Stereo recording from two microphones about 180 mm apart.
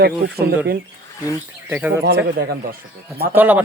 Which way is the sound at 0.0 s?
60° right (ahead or behind).